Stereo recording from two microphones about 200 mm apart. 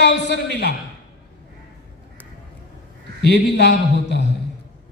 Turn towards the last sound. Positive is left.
turn(degrees=60)  # may be behind; listen again after turning